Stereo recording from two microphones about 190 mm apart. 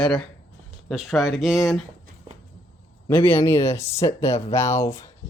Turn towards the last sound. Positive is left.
turn(degrees=15)  # may be behind; listen again after turning